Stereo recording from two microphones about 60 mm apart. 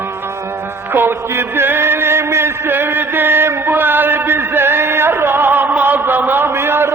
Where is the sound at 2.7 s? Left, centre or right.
Right.